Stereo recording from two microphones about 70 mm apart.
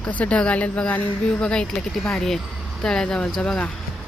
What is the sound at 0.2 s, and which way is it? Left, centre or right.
Speech, centre.